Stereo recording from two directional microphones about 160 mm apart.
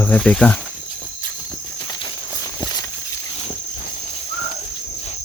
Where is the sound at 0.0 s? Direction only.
10° left (ahead or behind).